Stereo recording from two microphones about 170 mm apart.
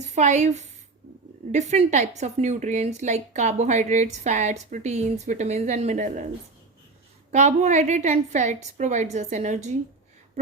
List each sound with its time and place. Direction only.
0.1 s a woman's voice: 45° right (ahead or behind)
7.3 s a woman's voice: 45° right (ahead or behind)